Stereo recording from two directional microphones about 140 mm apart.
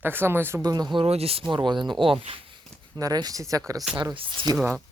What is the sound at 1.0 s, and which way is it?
Speech, 45° right (ahead or behind).